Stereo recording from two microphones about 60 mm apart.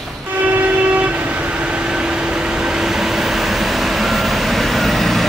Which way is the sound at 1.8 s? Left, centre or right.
Centre.